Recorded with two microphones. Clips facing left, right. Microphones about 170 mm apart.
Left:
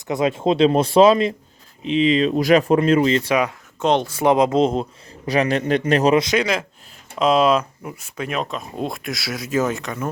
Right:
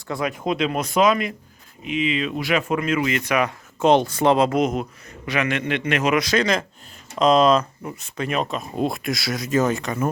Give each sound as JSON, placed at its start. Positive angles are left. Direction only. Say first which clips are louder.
{"t": 0.1, "sound": "a man's voice", "louder": "left 5 dB", "side_deg": 25}
{"t": 3.8, "sound": "speech", "louder": "right 2 dB", "side_deg": -5}
{"t": 4.1, "sound": "speech", "louder": "left 2 dB", "side_deg": 15}
{"t": 4.6, "sound": "a man's voice", "louder": "left 3 dB", "side_deg": 30}
{"t": 6.2, "sound": "speech", "louder": "even", "side_deg": 10}